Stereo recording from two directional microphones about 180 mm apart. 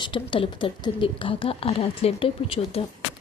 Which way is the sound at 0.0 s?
25° left (ahead or behind).